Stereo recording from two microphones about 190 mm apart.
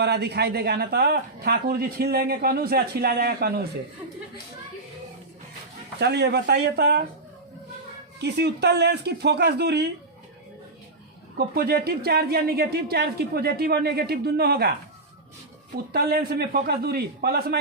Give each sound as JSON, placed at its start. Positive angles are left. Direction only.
{"t": 0.0, "sound": "speech", "side_deg": -60}
{"t": 6.0, "sound": "speech", "side_deg": -60}
{"t": 8.2, "sound": "speech", "side_deg": -60}
{"t": 11.3, "sound": "speech", "side_deg": -55}
{"t": 15.9, "sound": "a man's voice", "side_deg": -55}